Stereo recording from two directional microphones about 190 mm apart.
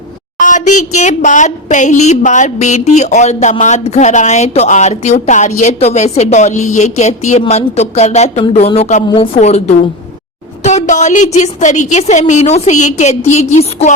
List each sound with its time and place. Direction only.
0.3 s a woman's voice: 40° left (ahead or behind)